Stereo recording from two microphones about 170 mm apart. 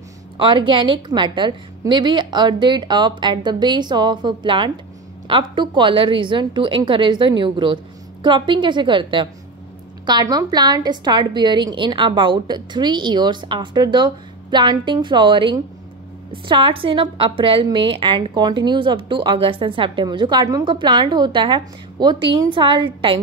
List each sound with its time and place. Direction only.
0.4 s a woman's voice: 30° right (ahead or behind)